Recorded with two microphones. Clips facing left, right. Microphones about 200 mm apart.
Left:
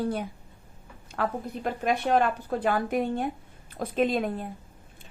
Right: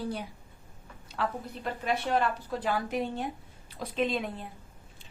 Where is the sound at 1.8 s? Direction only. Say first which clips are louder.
Left 4 dB; 55° left (ahead or behind).